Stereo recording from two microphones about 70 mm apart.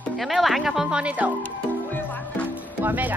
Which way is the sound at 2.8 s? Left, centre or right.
Right.